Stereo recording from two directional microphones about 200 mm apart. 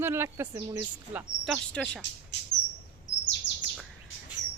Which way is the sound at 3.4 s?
65° left (ahead or behind).